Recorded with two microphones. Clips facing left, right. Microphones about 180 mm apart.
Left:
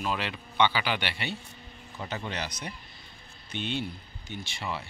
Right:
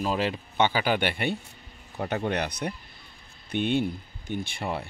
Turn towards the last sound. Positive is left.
turn(degrees=-55)  # may be behind; listen again after turning